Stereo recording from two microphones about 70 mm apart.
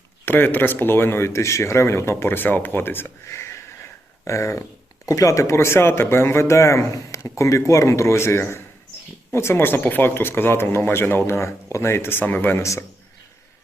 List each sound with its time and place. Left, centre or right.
0.3 s speech: left